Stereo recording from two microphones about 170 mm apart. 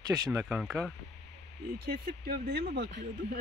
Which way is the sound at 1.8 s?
65° right (ahead or behind).